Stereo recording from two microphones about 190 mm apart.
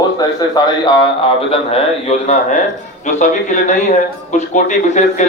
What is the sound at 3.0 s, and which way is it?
A man's voice, 40° left (ahead or behind).